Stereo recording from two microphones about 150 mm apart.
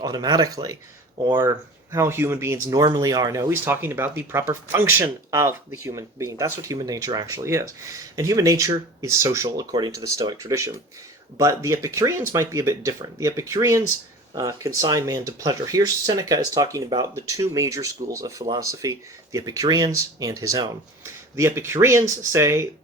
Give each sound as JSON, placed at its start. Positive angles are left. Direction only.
{"t": 0.0, "sound": "speech", "side_deg": -25}